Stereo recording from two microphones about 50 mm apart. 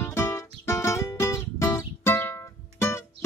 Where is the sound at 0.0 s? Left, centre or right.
Left.